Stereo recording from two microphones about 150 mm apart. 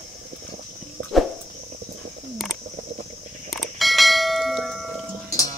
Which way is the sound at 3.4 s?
Centre (ahead or behind).